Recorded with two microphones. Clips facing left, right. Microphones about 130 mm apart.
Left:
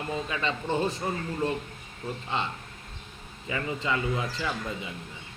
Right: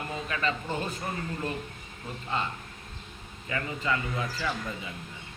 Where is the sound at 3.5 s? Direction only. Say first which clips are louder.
Left 1 dB; 25° left (ahead or behind).